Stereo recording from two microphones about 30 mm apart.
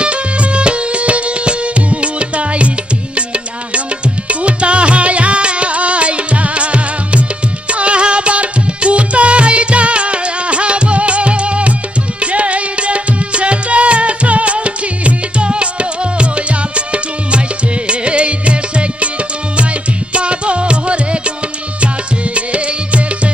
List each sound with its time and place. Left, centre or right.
0.0 s music: right